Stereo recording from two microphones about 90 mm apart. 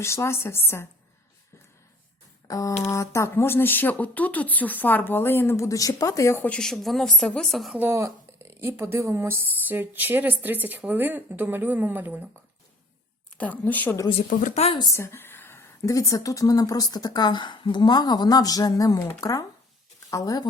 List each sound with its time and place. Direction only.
0.0 s speech: 30° left (ahead or behind)
2.5 s speech: 40° left (ahead or behind)
6.4 s speech: 10° left (ahead or behind)
7.9 s speech: 30° right (ahead or behind)
13.4 s speech: 20° left (ahead or behind)
14.9 s speech: 30° left (ahead or behind); by 20.5 s 45° left (ahead or behind)